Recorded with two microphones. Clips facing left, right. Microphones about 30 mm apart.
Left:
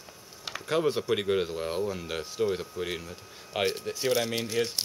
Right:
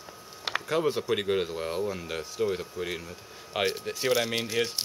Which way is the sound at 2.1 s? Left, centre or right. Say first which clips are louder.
Left 1 dB; centre.